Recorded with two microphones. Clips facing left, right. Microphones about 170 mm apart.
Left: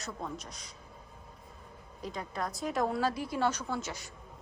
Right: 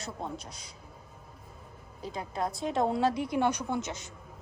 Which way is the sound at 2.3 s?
25° right (ahead or behind).